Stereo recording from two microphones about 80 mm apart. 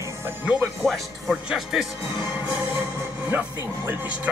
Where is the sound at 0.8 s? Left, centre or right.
Centre.